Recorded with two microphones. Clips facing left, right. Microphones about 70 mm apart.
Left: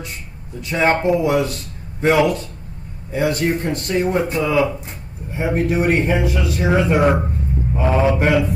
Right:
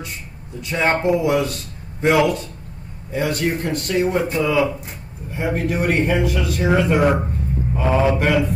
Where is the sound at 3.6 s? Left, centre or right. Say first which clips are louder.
Left 1 dB; centre.